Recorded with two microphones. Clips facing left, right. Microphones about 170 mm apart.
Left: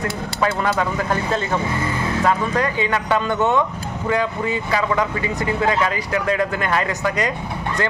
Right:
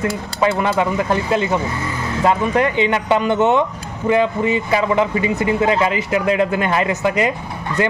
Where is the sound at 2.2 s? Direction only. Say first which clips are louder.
Right 4 dB; 20° right (ahead or behind).